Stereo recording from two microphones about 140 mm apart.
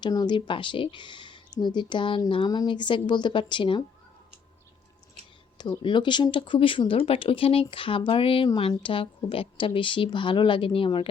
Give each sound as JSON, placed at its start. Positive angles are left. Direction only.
{"t": 0.0, "sound": "speech", "side_deg": 30}
{"t": 5.5, "sound": "speech", "side_deg": 30}